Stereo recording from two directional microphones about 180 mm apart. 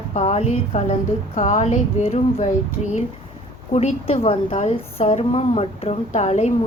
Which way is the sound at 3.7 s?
40° left (ahead or behind).